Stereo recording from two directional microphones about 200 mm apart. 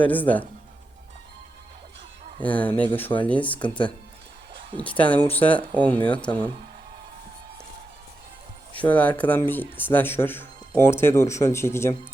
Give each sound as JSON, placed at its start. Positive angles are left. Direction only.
{"t": 0.1, "sound": "speech", "side_deg": 10}
{"t": 2.4, "sound": "speech", "side_deg": 5}
{"t": 3.6, "sound": "speech", "side_deg": 25}
{"t": 4.8, "sound": "speech", "side_deg": 5}
{"t": 8.8, "sound": "speech", "side_deg": 10}